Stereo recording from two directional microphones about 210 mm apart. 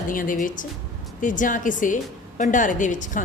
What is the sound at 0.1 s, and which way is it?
A woman's voice, 40° left (ahead or behind).